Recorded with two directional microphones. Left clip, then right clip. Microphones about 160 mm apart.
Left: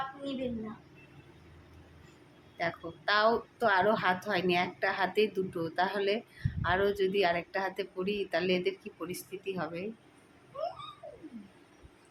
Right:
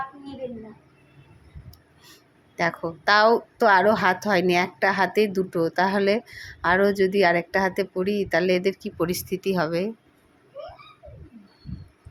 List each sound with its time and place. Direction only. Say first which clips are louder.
2.6 s a woman's voice: right 10 dB; 65° right (ahead or behind)